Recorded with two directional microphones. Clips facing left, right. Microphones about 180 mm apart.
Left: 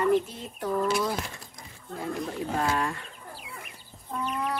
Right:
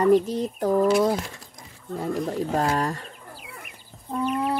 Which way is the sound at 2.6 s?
40° right (ahead or behind).